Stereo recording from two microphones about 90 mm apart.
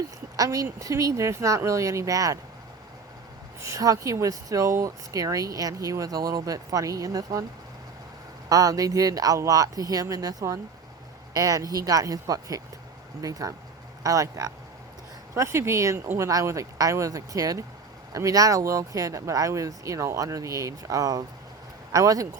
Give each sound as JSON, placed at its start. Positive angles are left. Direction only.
{"t": 0.3, "sound": "speech", "side_deg": -40}
{"t": 3.6, "sound": "speech", "side_deg": -40}
{"t": 8.4, "sound": "speech", "side_deg": -40}